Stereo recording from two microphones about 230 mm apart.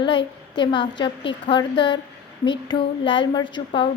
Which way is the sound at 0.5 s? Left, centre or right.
Centre.